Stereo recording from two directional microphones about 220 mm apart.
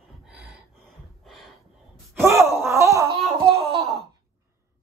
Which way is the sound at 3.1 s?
25° right (ahead or behind).